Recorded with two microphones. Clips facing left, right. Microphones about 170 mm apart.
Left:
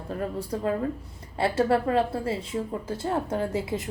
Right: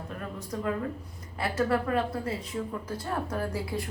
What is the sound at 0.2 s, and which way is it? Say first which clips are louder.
A woman's voice: left 6 dB; 30° left (ahead or behind).